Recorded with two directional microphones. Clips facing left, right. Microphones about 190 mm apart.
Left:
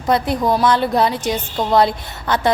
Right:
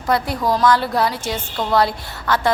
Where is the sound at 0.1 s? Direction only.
20° left (ahead or behind).